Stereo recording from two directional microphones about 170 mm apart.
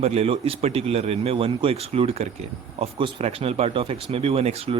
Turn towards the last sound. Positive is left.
turn(degrees=-35)  # may be behind; listen again after turning